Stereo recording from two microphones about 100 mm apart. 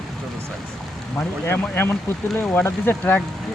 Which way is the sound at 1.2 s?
20° left (ahead or behind).